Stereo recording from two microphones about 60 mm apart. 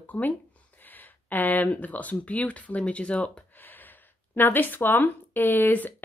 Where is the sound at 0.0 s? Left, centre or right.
Left.